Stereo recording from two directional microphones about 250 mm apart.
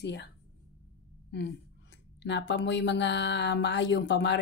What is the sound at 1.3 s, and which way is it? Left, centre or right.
Speech, left.